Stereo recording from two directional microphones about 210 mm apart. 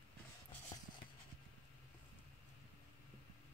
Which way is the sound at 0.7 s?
20° left (ahead or behind).